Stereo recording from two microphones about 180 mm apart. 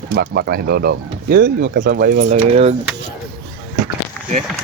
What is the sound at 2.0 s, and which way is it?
Speech, 45° right (ahead or behind).